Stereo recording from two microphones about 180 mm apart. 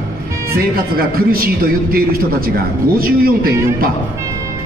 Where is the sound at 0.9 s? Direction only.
55° right (ahead or behind).